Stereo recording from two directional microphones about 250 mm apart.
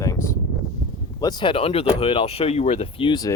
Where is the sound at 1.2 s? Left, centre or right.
Centre.